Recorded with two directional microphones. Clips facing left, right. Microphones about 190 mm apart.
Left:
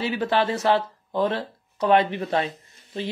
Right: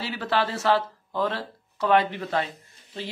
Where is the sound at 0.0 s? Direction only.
20° left (ahead or behind).